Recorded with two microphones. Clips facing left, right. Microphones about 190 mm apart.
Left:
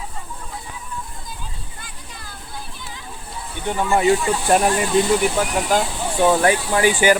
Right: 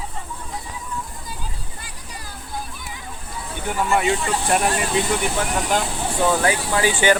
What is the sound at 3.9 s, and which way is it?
Speech, 35° left (ahead or behind).